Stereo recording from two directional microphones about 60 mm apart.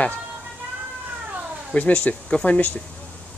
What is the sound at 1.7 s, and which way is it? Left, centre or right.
Speech, left.